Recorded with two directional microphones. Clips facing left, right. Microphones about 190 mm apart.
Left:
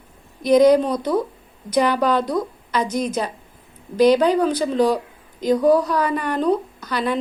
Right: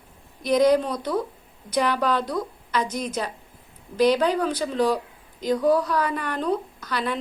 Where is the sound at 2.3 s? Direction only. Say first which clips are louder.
Left 4 dB; 15° left (ahead or behind).